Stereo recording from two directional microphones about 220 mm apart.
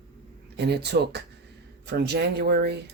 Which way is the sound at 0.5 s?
50° right (ahead or behind).